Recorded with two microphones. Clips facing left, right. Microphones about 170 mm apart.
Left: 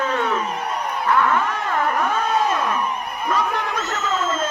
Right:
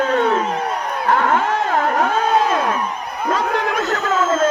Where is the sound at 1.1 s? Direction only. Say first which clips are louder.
Right 3 dB; 90° right.